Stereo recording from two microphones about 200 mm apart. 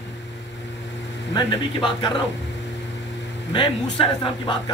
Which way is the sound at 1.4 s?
25° left (ahead or behind).